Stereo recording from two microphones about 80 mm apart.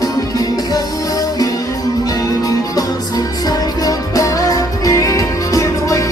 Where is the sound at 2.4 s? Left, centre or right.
Left.